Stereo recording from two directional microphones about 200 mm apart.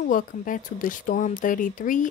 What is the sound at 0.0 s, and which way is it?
Speech, 45° left (ahead or behind).